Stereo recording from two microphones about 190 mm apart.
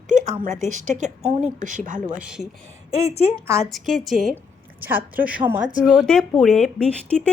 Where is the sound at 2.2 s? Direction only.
5° right (ahead or behind).